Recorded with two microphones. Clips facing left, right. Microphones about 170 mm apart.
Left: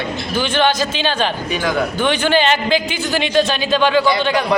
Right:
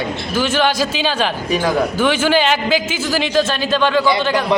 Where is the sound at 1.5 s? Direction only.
30° right (ahead or behind).